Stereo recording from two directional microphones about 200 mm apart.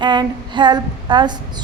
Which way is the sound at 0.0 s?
25° right (ahead or behind).